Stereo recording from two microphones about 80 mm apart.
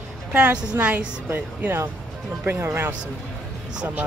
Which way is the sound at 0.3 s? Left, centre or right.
Right.